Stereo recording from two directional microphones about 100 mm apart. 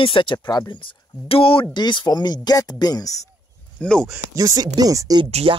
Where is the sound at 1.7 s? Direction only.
50° left (ahead or behind).